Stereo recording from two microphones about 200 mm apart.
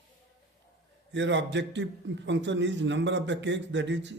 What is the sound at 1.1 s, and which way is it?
A man's voice, 65° right (ahead or behind).